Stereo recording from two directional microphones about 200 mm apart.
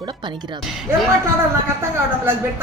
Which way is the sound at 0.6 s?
Centre (ahead or behind).